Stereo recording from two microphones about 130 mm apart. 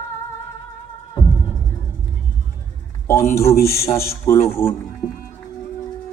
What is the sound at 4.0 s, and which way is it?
Speech, 20° left (ahead or behind).